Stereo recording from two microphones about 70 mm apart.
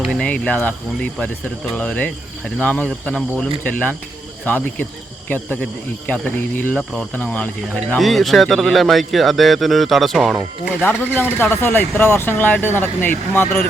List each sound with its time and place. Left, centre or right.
0.1 s speech: centre
3.4 s speech: left
6.1 s speech: left
7.9 s a man's voice: centre
10.8 s speech: left